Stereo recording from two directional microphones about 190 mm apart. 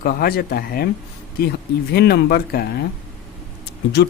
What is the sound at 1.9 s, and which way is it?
Speech, 60° left (ahead or behind).